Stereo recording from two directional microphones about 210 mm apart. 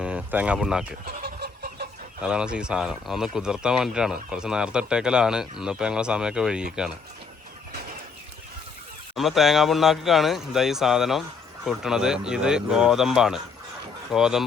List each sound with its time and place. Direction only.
0.0 s speech: 5° right (ahead or behind)
1.0 s chicken: 50° right (ahead or behind)
2.2 s speech: 5° right (ahead or behind)
9.1 s speech: centre (ahead or behind)